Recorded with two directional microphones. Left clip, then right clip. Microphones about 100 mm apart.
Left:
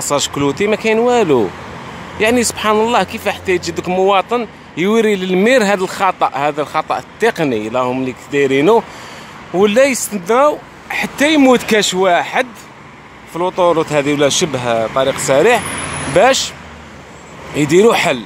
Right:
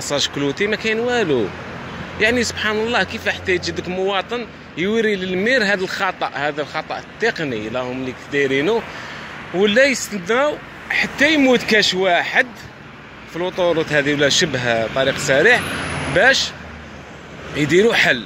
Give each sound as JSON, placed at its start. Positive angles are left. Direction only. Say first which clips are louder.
{"t": 0.1, "sound": "speech", "louder": "left 4 dB", "side_deg": 45}
{"t": 3.8, "sound": "speech", "louder": "left 8 dB", "side_deg": 65}
{"t": 4.1, "sound": "speech", "louder": "left 9 dB", "side_deg": 45}
{"t": 4.7, "sound": "speech", "louder": "left 5 dB", "side_deg": 55}
{"t": 15.1, "sound": "speech", "louder": "left 2 dB", "side_deg": 40}
{"t": 15.7, "sound": "vehicle", "louder": "left 2 dB", "side_deg": 5}
{"t": 17.6, "sound": "speech", "louder": "left 4 dB", "side_deg": 45}